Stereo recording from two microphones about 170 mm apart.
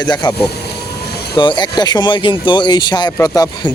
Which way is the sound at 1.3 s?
25° left (ahead or behind).